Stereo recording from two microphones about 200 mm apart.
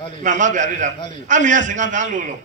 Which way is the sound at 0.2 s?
40° right (ahead or behind).